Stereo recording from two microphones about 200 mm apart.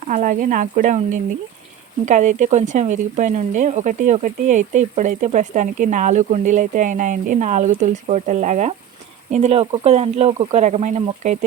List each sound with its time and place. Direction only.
0.1 s speech: 40° right (ahead or behind)